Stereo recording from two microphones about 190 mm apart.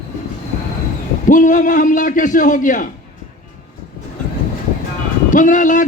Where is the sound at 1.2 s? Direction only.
45° left (ahead or behind).